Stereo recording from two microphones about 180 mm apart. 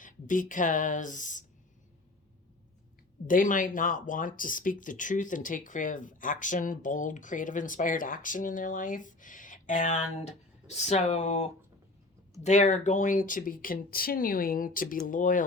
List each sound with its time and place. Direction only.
0.0 s speech: 45° left (ahead or behind)
3.2 s speech: 50° left (ahead or behind)